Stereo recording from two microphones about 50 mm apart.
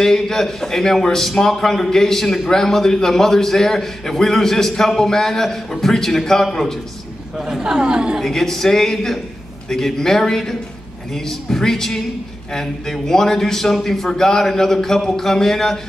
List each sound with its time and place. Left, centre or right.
0.0 s a man's voice: centre
7.3 s speech: centre
8.2 s a man's voice: centre